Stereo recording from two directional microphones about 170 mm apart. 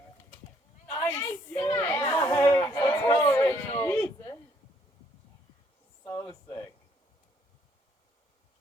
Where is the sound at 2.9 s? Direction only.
15° left (ahead or behind).